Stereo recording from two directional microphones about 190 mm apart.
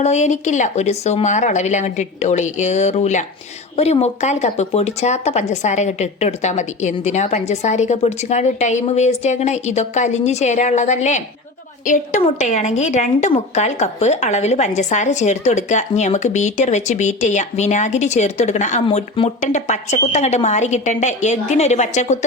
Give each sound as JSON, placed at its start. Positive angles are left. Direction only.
{"t": 0.0, "sound": "a woman's voice", "side_deg": 35}
{"t": 12.2, "sound": "a woman's voice", "side_deg": 35}